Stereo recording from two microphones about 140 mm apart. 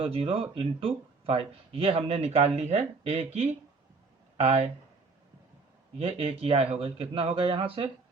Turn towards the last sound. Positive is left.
turn(degrees=-40)  # may be behind; listen again after turning